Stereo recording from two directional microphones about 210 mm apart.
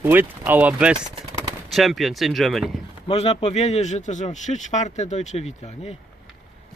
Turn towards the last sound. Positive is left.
turn(degrees=30)  # may be behind; listen again after turning